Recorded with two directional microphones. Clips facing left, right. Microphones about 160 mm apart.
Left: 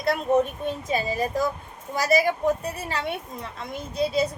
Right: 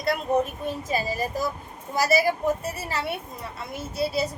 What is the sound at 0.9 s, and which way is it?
A woman's voice, 5° right (ahead or behind).